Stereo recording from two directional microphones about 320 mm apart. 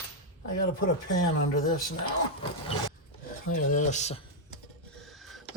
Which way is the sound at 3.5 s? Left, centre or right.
Left.